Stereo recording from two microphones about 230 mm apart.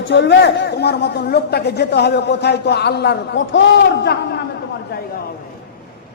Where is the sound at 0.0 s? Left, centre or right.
Left.